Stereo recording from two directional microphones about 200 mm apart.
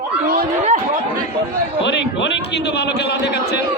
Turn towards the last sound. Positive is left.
turn(degrees=55)  # may be behind; listen again after turning